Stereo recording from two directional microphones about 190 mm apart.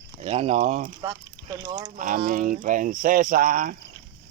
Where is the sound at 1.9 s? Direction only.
45° right (ahead or behind).